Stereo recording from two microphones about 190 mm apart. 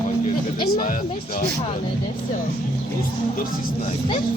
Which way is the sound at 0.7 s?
45° left (ahead or behind).